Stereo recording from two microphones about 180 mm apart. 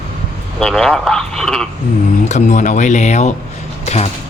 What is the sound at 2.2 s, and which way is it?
Speech, 40° left (ahead or behind).